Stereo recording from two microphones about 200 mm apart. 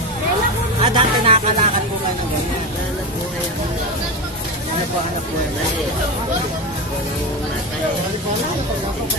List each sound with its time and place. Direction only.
0.8 s music: 30° right (ahead or behind)